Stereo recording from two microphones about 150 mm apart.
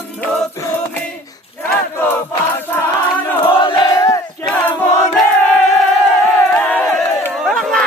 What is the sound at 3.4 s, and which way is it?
Battle cry, 30° left (ahead or behind).